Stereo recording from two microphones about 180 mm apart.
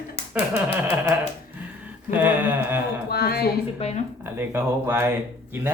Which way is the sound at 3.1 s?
60° left (ahead or behind).